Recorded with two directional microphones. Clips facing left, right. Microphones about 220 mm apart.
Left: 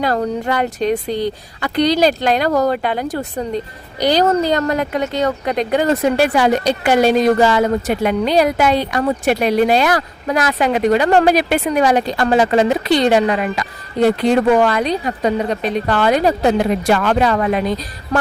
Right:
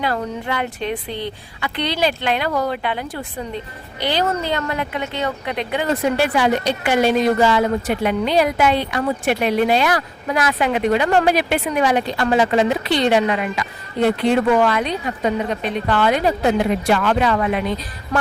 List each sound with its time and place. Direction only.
0.0 s speech: 40° left (ahead or behind)